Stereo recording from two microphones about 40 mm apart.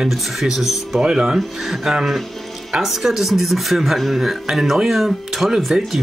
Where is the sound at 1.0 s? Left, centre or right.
Centre.